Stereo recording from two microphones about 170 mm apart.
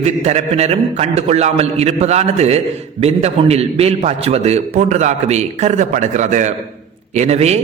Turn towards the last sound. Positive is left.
turn(degrees=-40)  # may be behind; listen again after turning